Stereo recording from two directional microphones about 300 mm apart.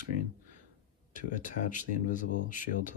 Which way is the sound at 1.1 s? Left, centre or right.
Left.